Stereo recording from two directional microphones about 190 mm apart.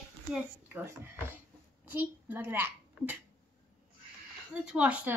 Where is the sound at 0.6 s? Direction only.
10° right (ahead or behind).